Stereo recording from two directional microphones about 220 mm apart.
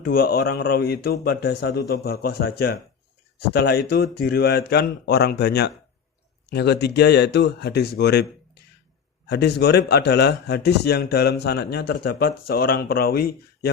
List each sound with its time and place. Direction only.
0.0 s a man's voice: 45° left (ahead or behind)